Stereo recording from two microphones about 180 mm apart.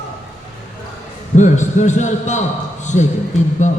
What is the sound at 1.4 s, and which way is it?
A man's voice, 40° left (ahead or behind).